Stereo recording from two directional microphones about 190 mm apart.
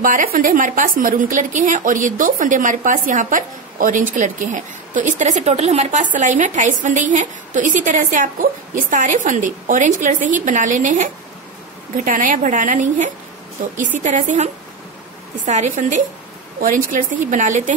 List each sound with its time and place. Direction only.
0.0 s a woman's voice: 45° right (ahead or behind)